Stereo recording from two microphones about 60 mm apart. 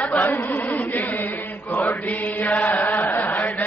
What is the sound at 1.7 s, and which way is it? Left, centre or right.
Chant, left.